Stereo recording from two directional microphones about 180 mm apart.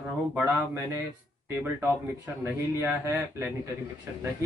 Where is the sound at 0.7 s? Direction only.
15° right (ahead or behind).